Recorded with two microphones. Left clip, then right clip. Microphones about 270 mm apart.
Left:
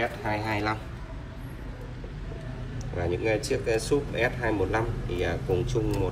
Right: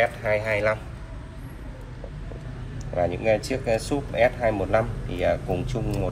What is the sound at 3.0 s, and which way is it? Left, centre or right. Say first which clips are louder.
Speech: right 1 dB; left.